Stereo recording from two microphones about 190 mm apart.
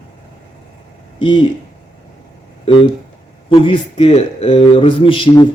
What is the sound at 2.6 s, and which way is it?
A man's voice, 25° left (ahead or behind).